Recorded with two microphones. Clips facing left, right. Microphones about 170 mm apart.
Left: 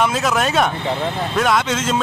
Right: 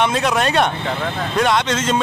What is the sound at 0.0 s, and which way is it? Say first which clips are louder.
Speech: right 1 dB; centre (ahead or behind).